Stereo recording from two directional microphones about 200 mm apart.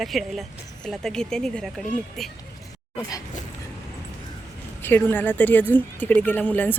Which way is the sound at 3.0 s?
15° left (ahead or behind).